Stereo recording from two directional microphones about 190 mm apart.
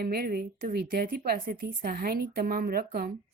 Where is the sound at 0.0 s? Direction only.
55° right (ahead or behind).